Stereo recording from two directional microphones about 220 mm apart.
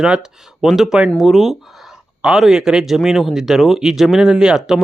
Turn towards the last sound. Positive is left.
turn(degrees=-5)  # may be behind; listen again after turning